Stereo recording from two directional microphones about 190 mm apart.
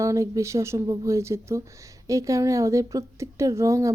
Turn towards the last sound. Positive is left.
turn(degrees=-15)  # may be behind; listen again after turning